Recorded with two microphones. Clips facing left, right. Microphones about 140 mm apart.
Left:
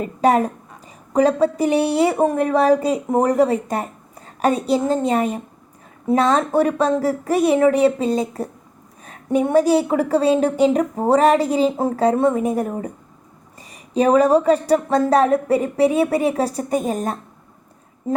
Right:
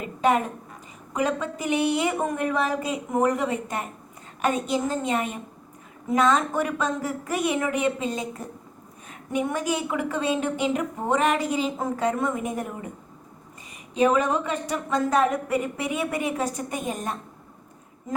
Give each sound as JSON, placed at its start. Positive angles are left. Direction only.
{"t": 0.0, "sound": "a woman's voice", "side_deg": 35}
{"t": 13.9, "sound": "a woman's voice", "side_deg": 35}